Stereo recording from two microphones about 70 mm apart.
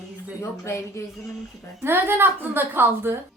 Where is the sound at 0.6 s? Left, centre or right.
Left.